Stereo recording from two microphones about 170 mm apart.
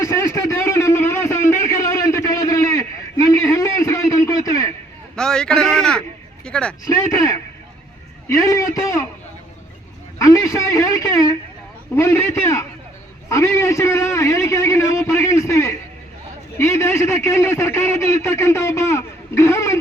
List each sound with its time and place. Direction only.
0.0 s a sound: 20° left (ahead or behind)
5.1 s a man's voice: 5° left (ahead or behind)
6.4 s vehicle: 5° left (ahead or behind)
6.8 s a man's voice: 20° left (ahead or behind)
10.2 s a man's voice: 20° left (ahead or behind)